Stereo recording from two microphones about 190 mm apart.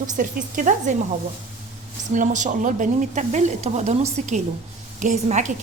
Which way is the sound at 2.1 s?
40° right (ahead or behind).